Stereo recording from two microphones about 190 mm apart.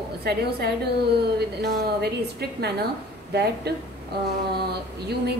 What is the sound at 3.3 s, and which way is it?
Speech, 60° right (ahead or behind).